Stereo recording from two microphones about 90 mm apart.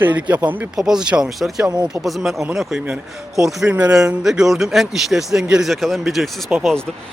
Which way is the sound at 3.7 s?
15° right (ahead or behind).